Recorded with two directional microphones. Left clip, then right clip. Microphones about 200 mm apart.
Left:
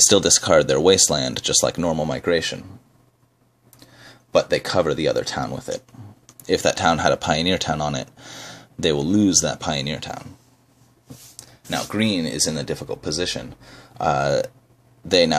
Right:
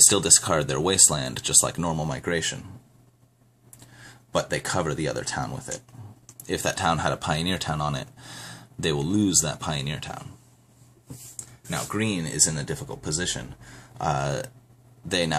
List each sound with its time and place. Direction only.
0.1 s speech: 30° left (ahead or behind)
4.0 s speech: 25° left (ahead or behind)
11.3 s speech: 40° left (ahead or behind)